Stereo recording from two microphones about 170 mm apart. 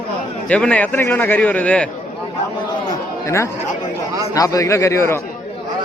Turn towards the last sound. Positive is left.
turn(degrees=15)  # may be behind; listen again after turning